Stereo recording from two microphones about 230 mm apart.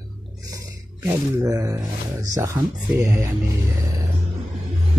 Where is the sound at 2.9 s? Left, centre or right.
Centre.